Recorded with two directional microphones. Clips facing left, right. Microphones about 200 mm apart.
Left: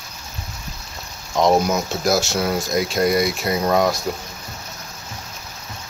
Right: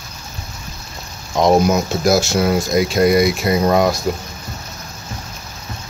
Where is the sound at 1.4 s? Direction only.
10° right (ahead or behind).